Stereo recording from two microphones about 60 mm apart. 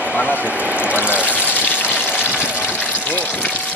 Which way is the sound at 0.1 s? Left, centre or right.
Left.